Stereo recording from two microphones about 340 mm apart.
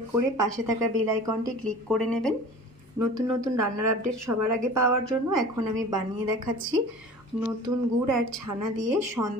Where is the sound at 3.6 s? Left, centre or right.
Right.